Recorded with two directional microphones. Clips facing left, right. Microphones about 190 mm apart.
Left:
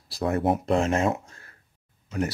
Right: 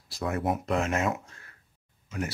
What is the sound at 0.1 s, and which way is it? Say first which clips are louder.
Speech: left 5 dB; 35° left (ahead or behind).